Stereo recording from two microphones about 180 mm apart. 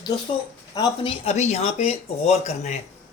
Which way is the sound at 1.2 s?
40° left (ahead or behind).